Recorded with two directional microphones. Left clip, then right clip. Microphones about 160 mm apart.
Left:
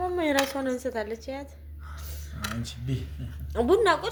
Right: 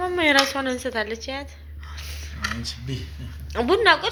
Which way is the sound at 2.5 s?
55° left (ahead or behind).